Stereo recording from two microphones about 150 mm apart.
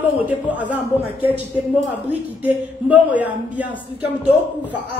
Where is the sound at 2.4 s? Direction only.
10° right (ahead or behind).